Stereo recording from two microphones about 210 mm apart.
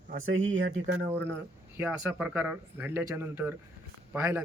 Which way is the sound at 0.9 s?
10° right (ahead or behind).